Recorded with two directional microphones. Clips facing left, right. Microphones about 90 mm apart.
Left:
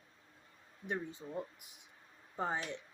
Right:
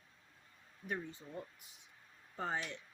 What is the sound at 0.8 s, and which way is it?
Speech, 20° left (ahead or behind).